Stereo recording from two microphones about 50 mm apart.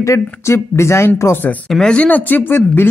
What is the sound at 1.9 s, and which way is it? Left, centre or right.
Speech, left.